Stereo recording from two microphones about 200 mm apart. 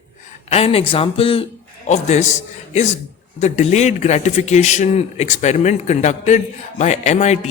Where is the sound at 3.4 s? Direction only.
35° left (ahead or behind).